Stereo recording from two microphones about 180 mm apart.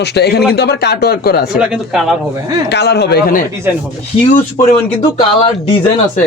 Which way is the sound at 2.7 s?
70° left (ahead or behind).